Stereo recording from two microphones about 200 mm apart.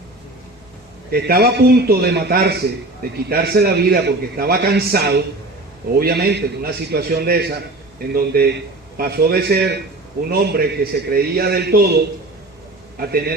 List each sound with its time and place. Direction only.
1.1 s a man's voice: 50° right (ahead or behind)